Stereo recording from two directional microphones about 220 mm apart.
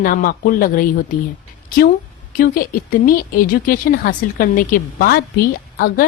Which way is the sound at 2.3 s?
40° left (ahead or behind).